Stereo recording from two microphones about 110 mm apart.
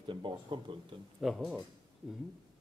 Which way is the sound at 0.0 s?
45° right (ahead or behind).